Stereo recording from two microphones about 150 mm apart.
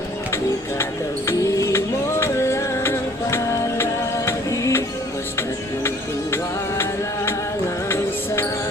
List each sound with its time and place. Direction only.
1.3 s music: 20° left (ahead or behind)
7.9 s music: 15° left (ahead or behind)